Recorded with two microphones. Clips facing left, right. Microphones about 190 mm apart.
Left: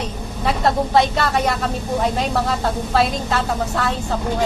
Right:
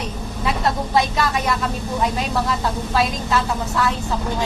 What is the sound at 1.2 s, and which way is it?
A woman's voice, 60° left (ahead or behind).